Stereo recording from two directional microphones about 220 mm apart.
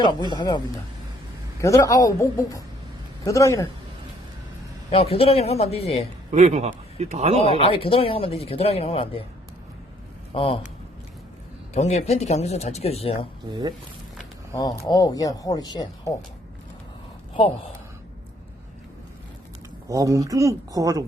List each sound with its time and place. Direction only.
0.0 s speech: 20° left (ahead or behind)
1.6 s speech: 15° left (ahead or behind)
4.9 s speech: 25° left (ahead or behind)
6.3 s speech: 30° right (ahead or behind)
7.4 s speech: 25° left (ahead or behind)
10.3 s speech: 25° left (ahead or behind)
11.7 s speech: 30° left (ahead or behind)
13.5 s speech: 20° right (ahead or behind)
14.5 s speech: 15° left (ahead or behind)
19.9 s speech: 15° right (ahead or behind)